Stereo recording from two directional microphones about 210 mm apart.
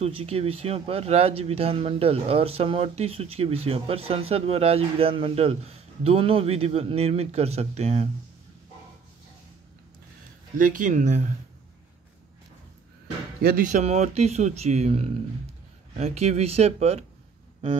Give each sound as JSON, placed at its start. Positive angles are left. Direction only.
{"t": 0.0, "sound": "speech", "side_deg": -30}
{"t": 10.6, "sound": "speech", "side_deg": -40}
{"t": 13.4, "sound": "speech", "side_deg": -45}